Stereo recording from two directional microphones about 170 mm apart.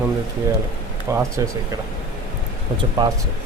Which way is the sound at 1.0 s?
15° right (ahead or behind).